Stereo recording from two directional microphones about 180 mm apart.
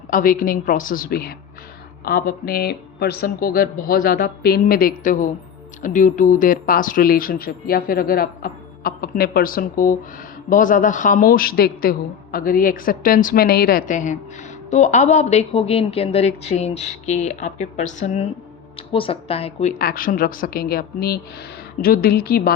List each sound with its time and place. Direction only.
0.1 s speech: 50° left (ahead or behind); by 19.7 s 35° left (ahead or behind)
19.8 s speech: 55° left (ahead or behind)